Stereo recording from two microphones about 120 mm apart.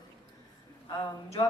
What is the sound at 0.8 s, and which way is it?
Speech, 30° left (ahead or behind).